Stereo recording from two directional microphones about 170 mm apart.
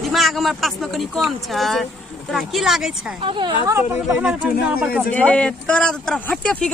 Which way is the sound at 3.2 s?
30° right (ahead or behind).